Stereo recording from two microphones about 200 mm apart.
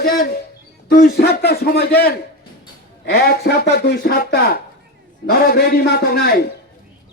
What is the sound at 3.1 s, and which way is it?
Speech, 50° left (ahead or behind).